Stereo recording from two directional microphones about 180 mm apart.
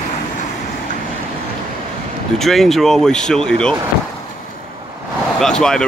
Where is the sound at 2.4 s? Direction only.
Centre (ahead or behind).